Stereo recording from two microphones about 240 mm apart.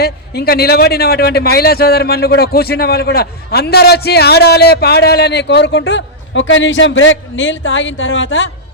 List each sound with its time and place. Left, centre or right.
0.0 s a man's voice: left